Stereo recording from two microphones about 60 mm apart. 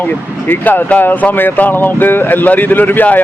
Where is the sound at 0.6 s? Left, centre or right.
Left.